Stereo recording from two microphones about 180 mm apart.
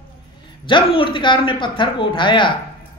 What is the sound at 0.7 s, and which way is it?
Speech, 30° left (ahead or behind).